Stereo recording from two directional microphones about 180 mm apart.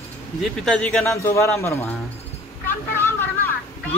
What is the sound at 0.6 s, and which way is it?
Speech, centre (ahead or behind).